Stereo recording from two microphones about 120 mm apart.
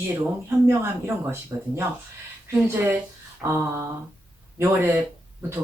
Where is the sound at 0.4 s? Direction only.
20° right (ahead or behind).